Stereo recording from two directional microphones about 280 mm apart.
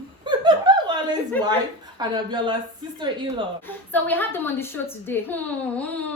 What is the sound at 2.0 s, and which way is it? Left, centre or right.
Speech, centre.